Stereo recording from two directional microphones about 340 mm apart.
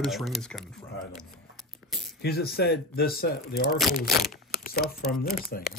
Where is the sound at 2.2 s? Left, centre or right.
Left.